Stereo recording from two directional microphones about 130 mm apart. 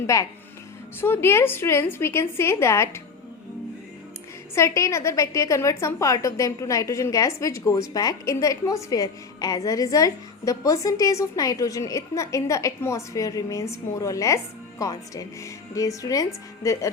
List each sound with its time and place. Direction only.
0.1 s a woman's voice: 25° left (ahead or behind)
4.5 s a woman's voice: 20° left (ahead or behind)